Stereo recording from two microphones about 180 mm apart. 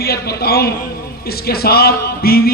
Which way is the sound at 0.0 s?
60° left (ahead or behind).